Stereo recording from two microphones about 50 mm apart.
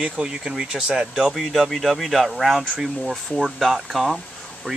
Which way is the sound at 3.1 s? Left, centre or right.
Centre.